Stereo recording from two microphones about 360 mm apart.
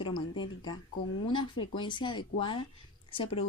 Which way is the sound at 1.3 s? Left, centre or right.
Centre.